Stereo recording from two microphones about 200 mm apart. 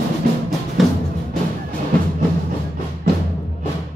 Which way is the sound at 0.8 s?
Centre (ahead or behind).